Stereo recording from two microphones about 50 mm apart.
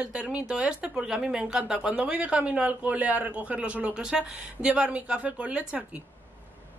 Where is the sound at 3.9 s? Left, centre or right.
Centre.